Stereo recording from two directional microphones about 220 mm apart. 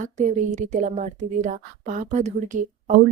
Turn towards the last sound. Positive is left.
turn(degrees=-35)  # may be behind; listen again after turning